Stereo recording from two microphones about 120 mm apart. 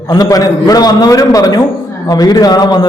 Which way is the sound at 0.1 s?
30° left (ahead or behind).